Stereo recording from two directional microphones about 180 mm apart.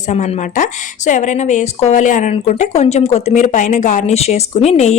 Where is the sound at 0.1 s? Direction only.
40° left (ahead or behind).